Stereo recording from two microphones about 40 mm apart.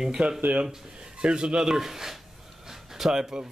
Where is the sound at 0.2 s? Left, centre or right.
Right.